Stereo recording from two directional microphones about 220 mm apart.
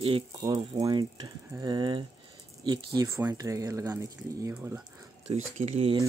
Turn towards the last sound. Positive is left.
turn(degrees=-30)  # may be behind; listen again after turning